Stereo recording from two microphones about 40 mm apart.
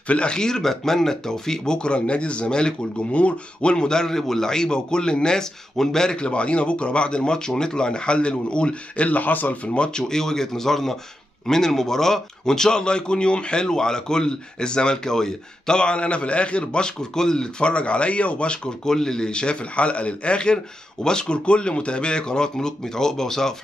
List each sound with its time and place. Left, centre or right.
0.1 s a man's voice: left
3.7 s a man's voice: centre
6.0 s a man's voice: left
9.7 s a man's voice: left
10.0 s a man's voice: centre; by 18.6 s left
18.9 s a man's voice: centre